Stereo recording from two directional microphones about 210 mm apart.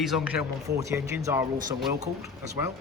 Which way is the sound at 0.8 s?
15° right (ahead or behind).